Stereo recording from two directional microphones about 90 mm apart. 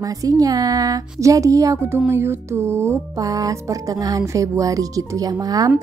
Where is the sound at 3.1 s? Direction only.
40° right (ahead or behind).